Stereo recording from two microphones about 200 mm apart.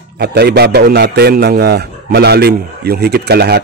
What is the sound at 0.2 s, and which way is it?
A man's voice, 55° right (ahead or behind).